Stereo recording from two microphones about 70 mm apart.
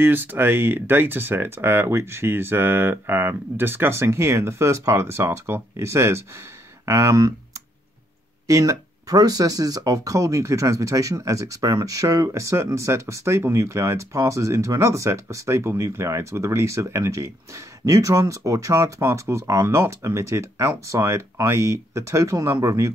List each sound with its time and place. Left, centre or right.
0.0 s speech: right